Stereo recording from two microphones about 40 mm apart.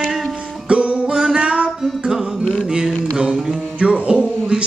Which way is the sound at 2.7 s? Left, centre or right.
Right.